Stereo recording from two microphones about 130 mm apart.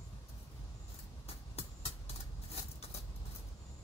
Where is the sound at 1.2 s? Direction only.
50° left (ahead or behind).